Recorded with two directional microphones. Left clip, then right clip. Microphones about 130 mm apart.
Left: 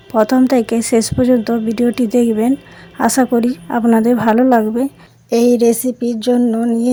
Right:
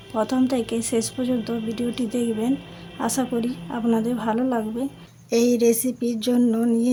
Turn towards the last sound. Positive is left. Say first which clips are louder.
# left 5 dB
turn(degrees=20)  # may be behind; listen again after turning